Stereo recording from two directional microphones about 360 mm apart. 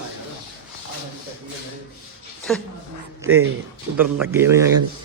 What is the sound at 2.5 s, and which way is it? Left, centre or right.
Speech, centre.